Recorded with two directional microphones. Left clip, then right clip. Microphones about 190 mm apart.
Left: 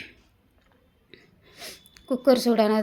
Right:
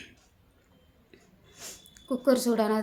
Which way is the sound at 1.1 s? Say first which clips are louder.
Left 6 dB; 15° left (ahead or behind).